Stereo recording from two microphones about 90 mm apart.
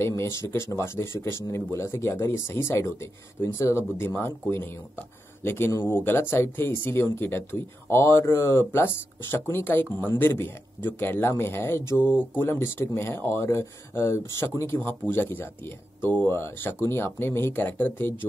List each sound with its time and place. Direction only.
0.0 s speech: 30° left (ahead or behind)